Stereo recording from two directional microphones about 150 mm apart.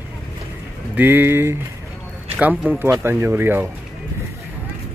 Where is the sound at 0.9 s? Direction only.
15° right (ahead or behind).